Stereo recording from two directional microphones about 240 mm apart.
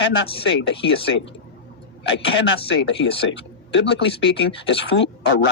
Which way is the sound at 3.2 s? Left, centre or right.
Left.